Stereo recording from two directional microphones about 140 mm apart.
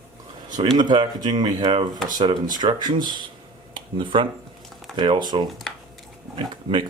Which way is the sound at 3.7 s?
35° right (ahead or behind).